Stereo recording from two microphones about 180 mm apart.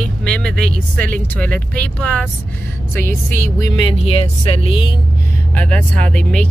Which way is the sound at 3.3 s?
45° right (ahead or behind).